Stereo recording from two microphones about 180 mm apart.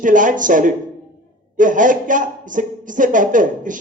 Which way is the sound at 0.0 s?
45° right (ahead or behind).